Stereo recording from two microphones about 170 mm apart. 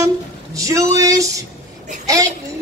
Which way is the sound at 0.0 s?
20° right (ahead or behind).